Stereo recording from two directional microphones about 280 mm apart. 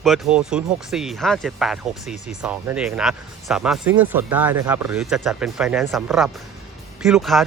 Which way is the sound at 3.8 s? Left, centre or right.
Right.